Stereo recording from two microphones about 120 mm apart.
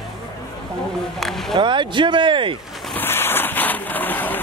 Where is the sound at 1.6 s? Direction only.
40° right (ahead or behind).